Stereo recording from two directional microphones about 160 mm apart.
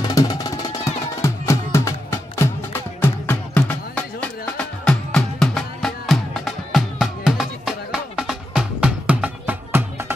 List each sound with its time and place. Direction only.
0.0 s music: 25° left (ahead or behind); by 10.1 s 15° right (ahead or behind)